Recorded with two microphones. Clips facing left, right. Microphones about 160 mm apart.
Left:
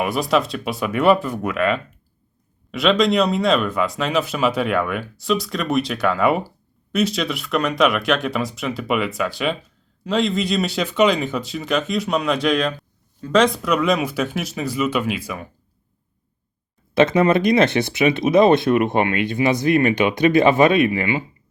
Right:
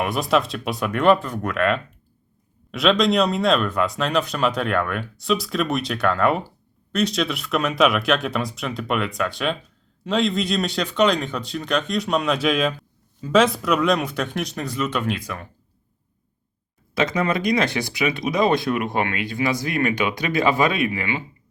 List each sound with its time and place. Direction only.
0.0 s speech: centre (ahead or behind)
16.9 s speech: 25° left (ahead or behind)